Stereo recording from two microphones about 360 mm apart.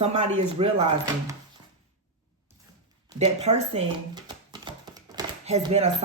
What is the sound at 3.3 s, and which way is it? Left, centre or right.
Speech, centre.